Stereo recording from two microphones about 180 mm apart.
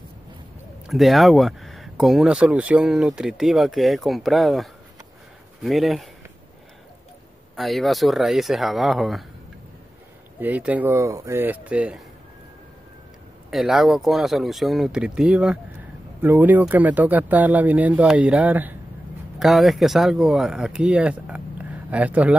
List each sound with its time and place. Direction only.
0.8 s speech: centre (ahead or behind)
7.5 s speech: centre (ahead or behind)
10.4 s speech: 10° right (ahead or behind)
13.5 s speech: centre (ahead or behind)